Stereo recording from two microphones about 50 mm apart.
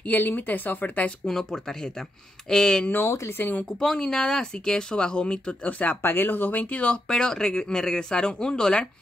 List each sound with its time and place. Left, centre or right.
0.0 s speech: left
1.2 s speech: centre
3.3 s speech: left
3.8 s speech: centre; by 5.9 s left
6.0 s speech: left
7.1 s speech: centre